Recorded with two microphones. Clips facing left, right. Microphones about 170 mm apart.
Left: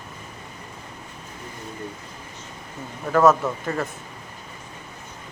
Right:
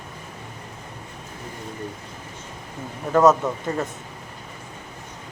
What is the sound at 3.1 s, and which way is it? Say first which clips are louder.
Speech: right 1 dB; 20° right (ahead or behind).